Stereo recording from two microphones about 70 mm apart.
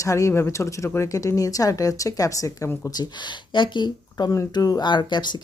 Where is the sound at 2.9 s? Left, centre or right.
Left.